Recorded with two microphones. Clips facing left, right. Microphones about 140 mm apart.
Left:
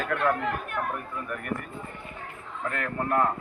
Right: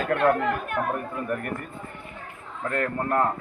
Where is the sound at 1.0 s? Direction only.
40° right (ahead or behind).